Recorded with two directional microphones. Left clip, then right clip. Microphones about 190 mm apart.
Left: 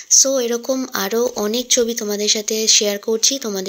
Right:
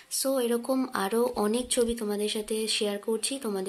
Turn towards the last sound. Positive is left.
turn(degrees=20)  # may be behind; listen again after turning